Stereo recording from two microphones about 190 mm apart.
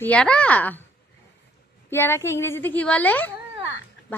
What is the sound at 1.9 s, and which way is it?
A woman's voice, 10° left (ahead or behind).